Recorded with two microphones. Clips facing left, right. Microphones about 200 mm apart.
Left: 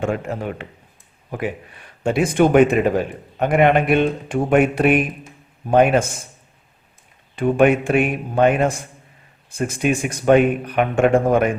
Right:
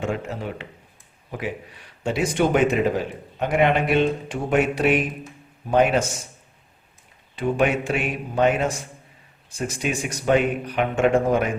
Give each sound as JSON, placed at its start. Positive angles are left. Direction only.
{"t": 0.0, "sound": "a man's voice", "side_deg": 55}
{"t": 7.3, "sound": "speech", "side_deg": 55}